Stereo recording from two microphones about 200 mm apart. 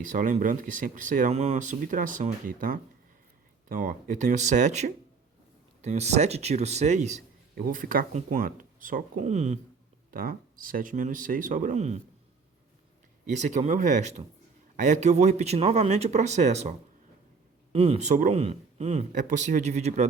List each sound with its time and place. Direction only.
0.1 s a man's voice: 40° right (ahead or behind)
10.1 s a man's voice: 45° right (ahead or behind)
13.3 s a man's voice: 35° right (ahead or behind)